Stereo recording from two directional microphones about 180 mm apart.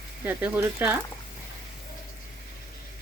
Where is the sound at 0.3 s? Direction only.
10° right (ahead or behind).